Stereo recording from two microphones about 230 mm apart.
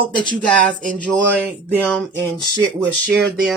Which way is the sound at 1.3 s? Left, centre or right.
Centre.